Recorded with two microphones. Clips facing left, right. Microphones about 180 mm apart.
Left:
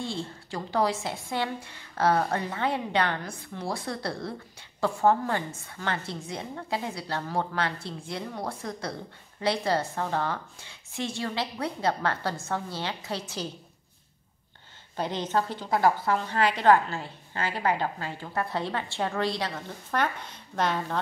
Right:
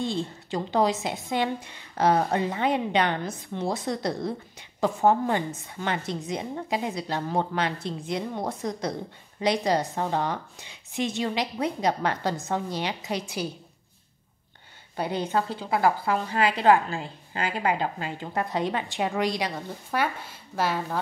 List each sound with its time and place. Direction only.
0.0 s a woman's voice: 20° right (ahead or behind)
15.0 s a woman's voice: 10° right (ahead or behind)